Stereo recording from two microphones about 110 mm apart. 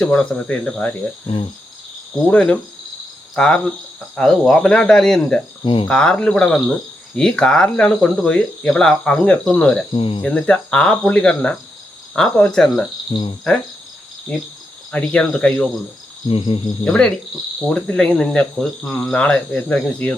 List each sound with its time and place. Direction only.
0.0 s speech: 10° left (ahead or behind)
2.2 s speech: 10° left (ahead or behind)
4.1 s cricket: 5° left (ahead or behind)
5.6 s speech: 50° left (ahead or behind)
5.9 s speech: 5° left (ahead or behind)
9.9 s cricket: 55° left (ahead or behind)
10.2 s speech: 10° left (ahead or behind)
13.1 s speech: 50° left (ahead or behind)
14.3 s speech: 10° left (ahead or behind)
16.3 s speech: 50° left (ahead or behind)
16.8 s speech: 10° left (ahead or behind)